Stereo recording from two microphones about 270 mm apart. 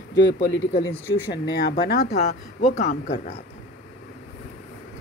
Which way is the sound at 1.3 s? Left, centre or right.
Left.